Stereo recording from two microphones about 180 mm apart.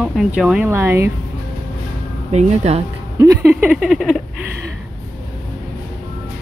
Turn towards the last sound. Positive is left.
turn(degrees=0)  # may be behind; listen again after turning